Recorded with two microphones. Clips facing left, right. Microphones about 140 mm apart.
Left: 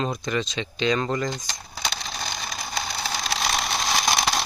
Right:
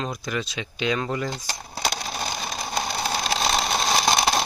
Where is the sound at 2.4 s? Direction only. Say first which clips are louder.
Right 3 dB; 30° right (ahead or behind).